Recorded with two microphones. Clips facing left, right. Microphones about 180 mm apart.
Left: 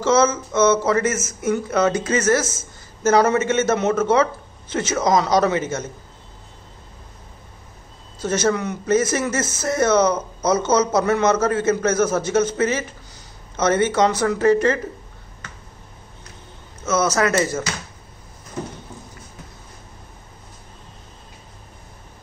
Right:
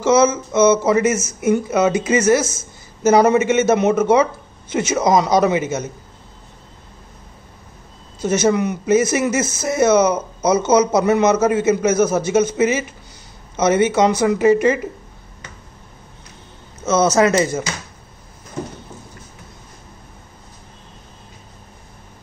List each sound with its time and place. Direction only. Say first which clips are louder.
0.0 s speech: right 3 dB; 10° right (ahead or behind)
8.2 s speech: right 4 dB; 10° right (ahead or behind)
16.8 s speech: right 5 dB; 20° right (ahead or behind)